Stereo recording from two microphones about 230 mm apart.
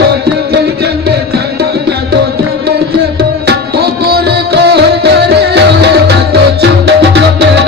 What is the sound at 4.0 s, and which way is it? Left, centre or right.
Music, right.